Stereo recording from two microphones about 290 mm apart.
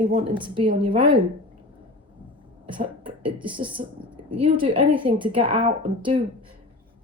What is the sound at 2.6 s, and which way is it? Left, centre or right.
A woman's voice, centre.